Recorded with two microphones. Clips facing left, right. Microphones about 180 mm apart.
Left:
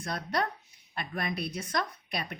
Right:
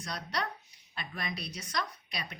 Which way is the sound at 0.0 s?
50° left (ahead or behind).